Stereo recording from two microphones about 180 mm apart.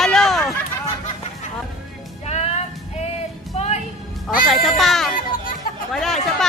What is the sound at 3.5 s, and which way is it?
Music, 35° left (ahead or behind).